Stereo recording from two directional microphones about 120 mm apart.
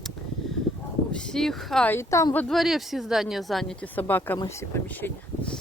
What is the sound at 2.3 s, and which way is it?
Speech, centre (ahead or behind).